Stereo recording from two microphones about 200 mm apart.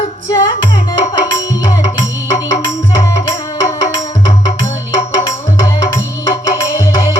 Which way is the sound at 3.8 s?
30° left (ahead or behind).